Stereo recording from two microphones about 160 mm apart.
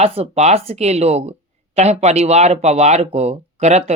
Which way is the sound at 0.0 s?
40° right (ahead or behind).